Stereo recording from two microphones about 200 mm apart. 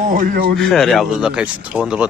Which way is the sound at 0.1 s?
45° right (ahead or behind).